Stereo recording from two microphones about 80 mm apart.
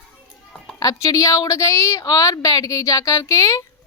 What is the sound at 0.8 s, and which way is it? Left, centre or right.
A woman's voice, left.